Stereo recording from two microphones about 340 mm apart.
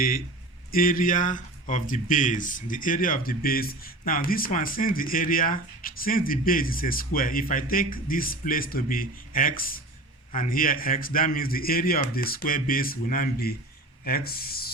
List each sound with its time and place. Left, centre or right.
0.7 s speech: left